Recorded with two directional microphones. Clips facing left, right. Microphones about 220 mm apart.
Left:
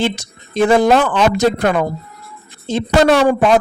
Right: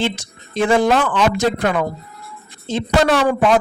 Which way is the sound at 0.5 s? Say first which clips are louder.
Left 3 dB; 40° left (ahead or behind).